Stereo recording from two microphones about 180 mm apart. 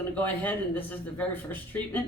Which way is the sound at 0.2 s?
10° left (ahead or behind).